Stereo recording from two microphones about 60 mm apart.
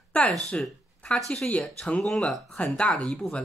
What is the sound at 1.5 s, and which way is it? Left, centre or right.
Speech, centre.